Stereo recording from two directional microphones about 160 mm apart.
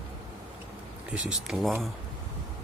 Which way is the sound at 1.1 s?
Centre (ahead or behind).